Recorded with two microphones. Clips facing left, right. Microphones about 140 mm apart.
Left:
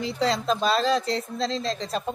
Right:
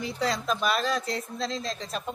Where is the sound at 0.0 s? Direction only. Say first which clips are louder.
Left 4 dB; 30° left (ahead or behind).